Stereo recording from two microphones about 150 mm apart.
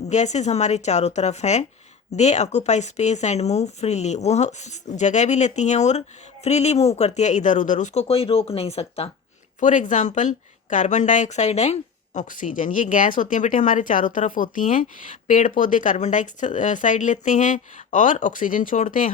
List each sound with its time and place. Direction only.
0.1 s speech: 50° left (ahead or behind)
9.6 s a woman's voice: 55° left (ahead or behind)